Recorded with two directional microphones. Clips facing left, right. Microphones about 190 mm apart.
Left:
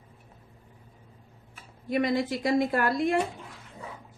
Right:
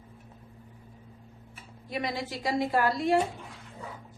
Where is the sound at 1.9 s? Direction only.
55° left (ahead or behind).